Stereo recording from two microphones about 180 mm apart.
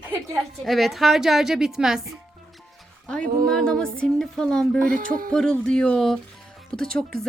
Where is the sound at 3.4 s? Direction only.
5° left (ahead or behind).